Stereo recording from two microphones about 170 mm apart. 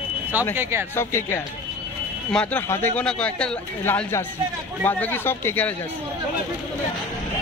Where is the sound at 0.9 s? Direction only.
15° left (ahead or behind).